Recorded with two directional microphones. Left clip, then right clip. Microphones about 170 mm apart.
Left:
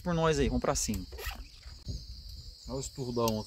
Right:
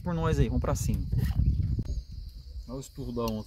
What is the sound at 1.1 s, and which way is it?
Speech, 20° left (ahead or behind).